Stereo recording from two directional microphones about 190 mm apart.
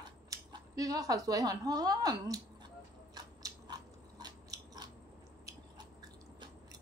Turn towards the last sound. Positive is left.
turn(degrees=-20)  # may be behind; listen again after turning